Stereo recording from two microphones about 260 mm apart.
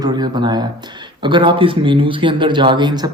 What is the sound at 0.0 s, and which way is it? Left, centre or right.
Speech, centre.